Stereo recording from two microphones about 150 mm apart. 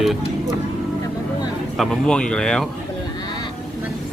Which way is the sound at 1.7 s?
5° left (ahead or behind).